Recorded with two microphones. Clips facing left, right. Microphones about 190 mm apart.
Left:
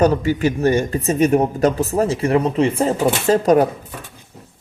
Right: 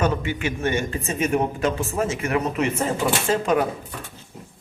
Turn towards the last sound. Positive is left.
turn(degrees=40)  # may be behind; listen again after turning